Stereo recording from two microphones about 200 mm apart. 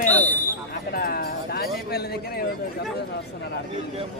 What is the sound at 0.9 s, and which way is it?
Music, 50° left (ahead or behind).